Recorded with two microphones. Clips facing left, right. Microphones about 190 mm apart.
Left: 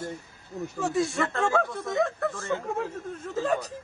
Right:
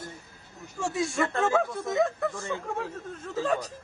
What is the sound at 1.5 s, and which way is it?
A man's voice, centre (ahead or behind).